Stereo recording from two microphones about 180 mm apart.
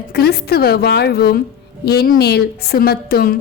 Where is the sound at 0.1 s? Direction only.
60° left (ahead or behind).